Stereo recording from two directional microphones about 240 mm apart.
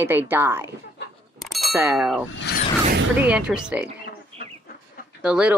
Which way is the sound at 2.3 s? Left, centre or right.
Left.